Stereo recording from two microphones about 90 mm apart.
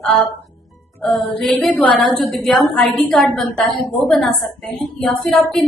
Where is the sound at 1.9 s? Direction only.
Centre (ahead or behind).